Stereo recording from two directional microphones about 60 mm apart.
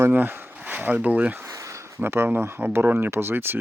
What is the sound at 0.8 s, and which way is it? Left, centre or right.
Speech, right.